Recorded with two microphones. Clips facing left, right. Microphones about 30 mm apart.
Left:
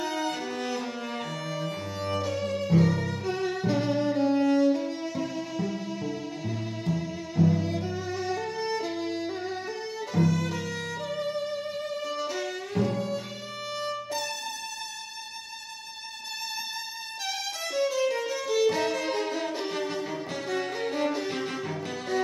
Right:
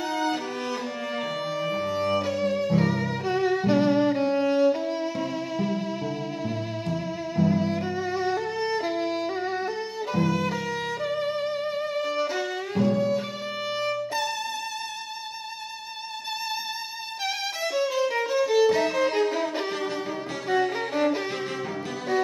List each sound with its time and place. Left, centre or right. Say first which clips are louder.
0.0 s music: right 3 dB; centre
10.1 s violin: right 1 dB; right
11.1 s music: right 3 dB; centre
13.7 s violin: right 4 dB; centre
17.7 s music: right 1 dB; centre
18.7 s violin: right 4 dB; centre
20.7 s violin: right 3 dB; centre